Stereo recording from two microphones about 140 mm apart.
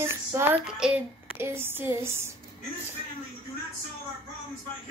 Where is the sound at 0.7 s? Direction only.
5° right (ahead or behind).